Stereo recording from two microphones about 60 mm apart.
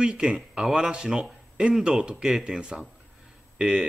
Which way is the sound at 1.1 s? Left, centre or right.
Centre.